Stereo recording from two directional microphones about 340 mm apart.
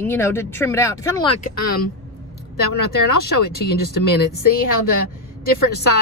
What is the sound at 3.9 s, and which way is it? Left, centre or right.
Speech, left.